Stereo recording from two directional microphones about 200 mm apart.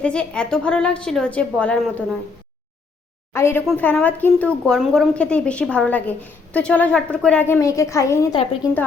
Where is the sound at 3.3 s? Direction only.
15° left (ahead or behind).